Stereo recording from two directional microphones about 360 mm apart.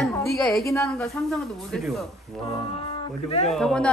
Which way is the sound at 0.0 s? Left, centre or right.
Centre.